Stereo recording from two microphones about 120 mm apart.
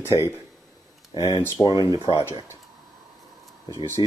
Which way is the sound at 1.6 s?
30° right (ahead or behind).